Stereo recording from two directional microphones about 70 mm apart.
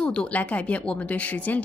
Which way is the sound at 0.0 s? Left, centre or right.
Centre.